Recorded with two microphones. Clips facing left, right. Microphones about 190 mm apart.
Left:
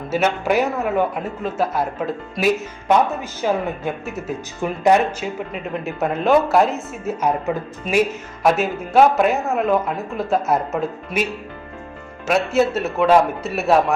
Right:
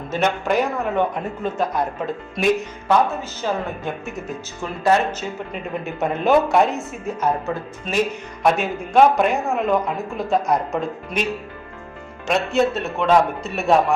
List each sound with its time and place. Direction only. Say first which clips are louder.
0.1 s a man's voice: left 2 dB; 5° left (ahead or behind)
2.8 s speech: left 1 dB; 15° left (ahead or behind)
5.8 s a man's voice: left 1 dB; centre (ahead or behind)
7.2 s a man's voice: left 1 dB; 15° left (ahead or behind)
12.3 s a man's voice: left 2 dB; 5° left (ahead or behind)